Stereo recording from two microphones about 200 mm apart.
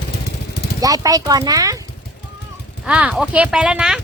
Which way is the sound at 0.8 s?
15° right (ahead or behind).